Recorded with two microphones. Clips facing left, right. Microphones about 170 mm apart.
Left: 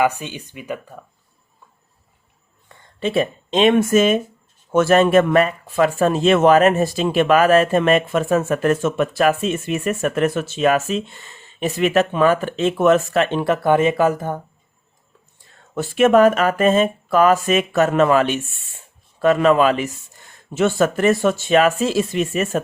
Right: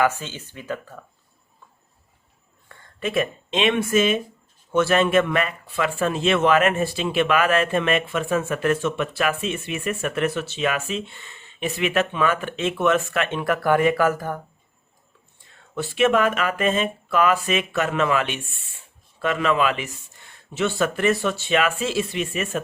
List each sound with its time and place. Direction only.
0.0 s speech: 15° left (ahead or behind)
2.6 s speech: 30° left (ahead or behind)
15.7 s speech: 45° left (ahead or behind)